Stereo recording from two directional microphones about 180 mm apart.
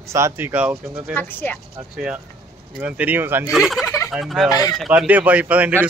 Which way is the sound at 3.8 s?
20° left (ahead or behind).